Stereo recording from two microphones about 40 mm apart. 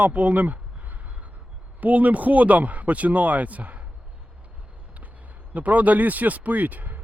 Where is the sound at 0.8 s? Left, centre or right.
Right.